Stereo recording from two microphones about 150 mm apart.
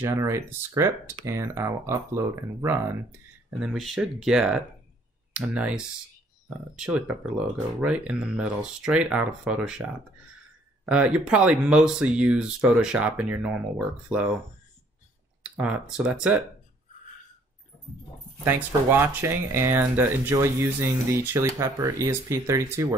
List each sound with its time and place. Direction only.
0.0 s speech: 20° right (ahead or behind)
10.9 s speech: 10° right (ahead or behind)
15.5 s speech: 10° right (ahead or behind)
18.4 s speech: 15° right (ahead or behind)